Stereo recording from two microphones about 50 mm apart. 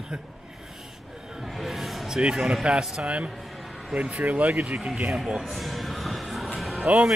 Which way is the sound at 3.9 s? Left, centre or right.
Right.